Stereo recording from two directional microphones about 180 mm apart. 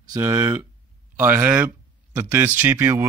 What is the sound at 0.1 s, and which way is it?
Speech, 15° right (ahead or behind).